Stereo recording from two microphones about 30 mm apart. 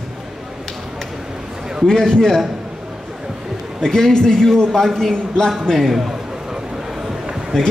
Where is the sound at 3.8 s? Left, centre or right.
Centre.